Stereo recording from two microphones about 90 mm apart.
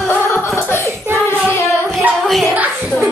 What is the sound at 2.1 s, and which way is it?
Music, centre (ahead or behind).